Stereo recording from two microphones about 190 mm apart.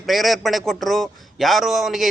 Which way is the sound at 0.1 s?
Centre (ahead or behind).